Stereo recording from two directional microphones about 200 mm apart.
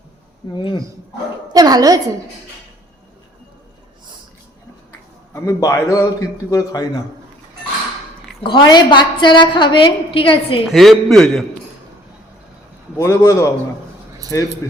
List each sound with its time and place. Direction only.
0.5 s a woman's voice: 20° left (ahead or behind)
1.5 s a woman's voice: 20° right (ahead or behind)
4.9 s speech: 15° left (ahead or behind)
8.4 s a woman's voice: 20° left (ahead or behind)
10.7 s a man's voice: centre (ahead or behind)
13.0 s a man's voice: 15° left (ahead or behind)